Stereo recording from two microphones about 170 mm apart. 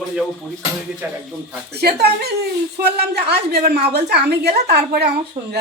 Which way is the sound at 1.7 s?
70° right (ahead or behind).